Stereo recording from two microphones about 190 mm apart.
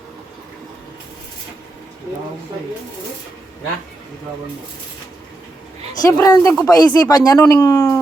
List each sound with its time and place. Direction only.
6.1 s speech: 15° left (ahead or behind)